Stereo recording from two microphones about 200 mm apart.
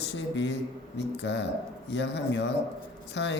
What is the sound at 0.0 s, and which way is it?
A man's voice, 65° left (ahead or behind).